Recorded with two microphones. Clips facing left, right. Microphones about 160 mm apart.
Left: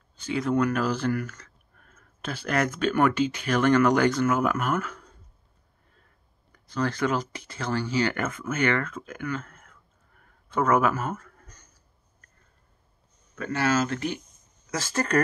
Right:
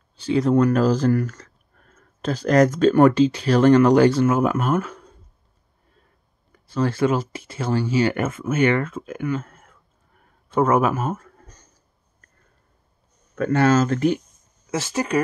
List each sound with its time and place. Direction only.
0.2 s speech: 35° right (ahead or behind)
6.5 s speech: 25° right (ahead or behind)
13.4 s speech: 50° right (ahead or behind)
14.7 s speech: 20° right (ahead or behind)